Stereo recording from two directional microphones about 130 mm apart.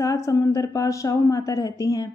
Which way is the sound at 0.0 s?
25° left (ahead or behind).